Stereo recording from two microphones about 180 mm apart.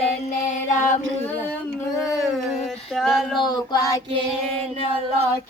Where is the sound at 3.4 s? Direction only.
25° left (ahead or behind).